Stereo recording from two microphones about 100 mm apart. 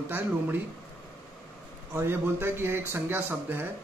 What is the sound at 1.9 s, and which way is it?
A man's voice, 25° right (ahead or behind).